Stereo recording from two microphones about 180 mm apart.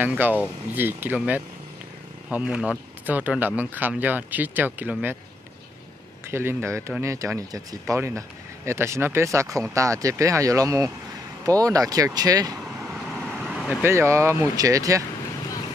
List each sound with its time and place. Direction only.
0.0 s speech: 10° right (ahead or behind)
6.3 s speech: 15° right (ahead or behind)
12.9 s vehicle: centre (ahead or behind)
13.8 s speech: 15° right (ahead or behind)